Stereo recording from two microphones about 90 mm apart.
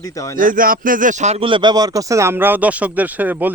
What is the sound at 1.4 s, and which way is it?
Speech, 70° right (ahead or behind).